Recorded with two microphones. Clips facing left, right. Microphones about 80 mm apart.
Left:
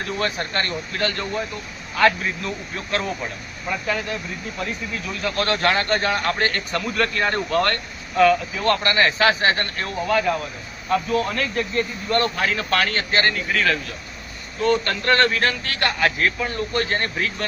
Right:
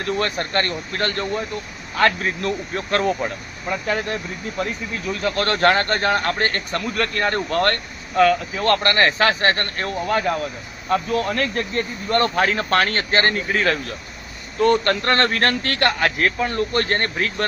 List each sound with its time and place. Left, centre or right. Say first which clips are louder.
0.0 s a man's voice: right 2 dB; right
14.6 s a man's voice: right 3 dB; right